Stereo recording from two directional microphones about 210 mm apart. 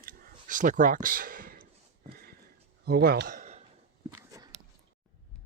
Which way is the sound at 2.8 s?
45° right (ahead or behind).